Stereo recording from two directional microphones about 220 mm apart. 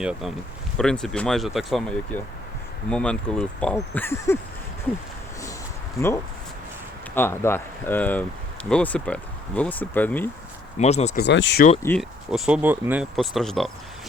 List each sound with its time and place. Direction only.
0.0 s speech: 5° right (ahead or behind)
6.0 s speech: 15° left (ahead or behind)
10.8 s speech: 30° left (ahead or behind)
11.2 s speech: 50° left (ahead or behind)
11.8 s speech: 10° left (ahead or behind)
12.3 s speech: 5° right (ahead or behind)